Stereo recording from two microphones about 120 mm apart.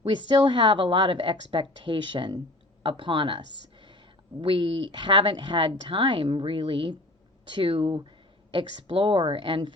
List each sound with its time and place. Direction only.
0.1 s speech: 40° right (ahead or behind)